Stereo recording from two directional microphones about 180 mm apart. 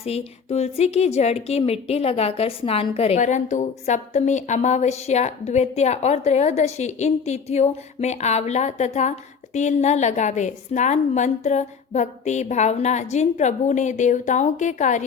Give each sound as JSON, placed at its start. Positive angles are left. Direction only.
{"t": 0.0, "sound": "a woman's voice", "side_deg": 35}